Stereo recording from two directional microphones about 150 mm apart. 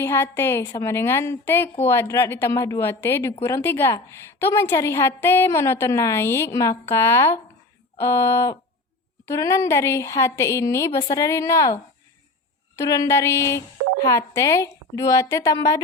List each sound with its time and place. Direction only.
0.0 s a woman's voice: 15° left (ahead or behind)